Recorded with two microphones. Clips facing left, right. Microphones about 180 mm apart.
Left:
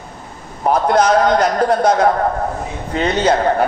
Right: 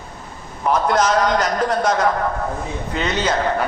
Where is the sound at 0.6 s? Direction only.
35° left (ahead or behind).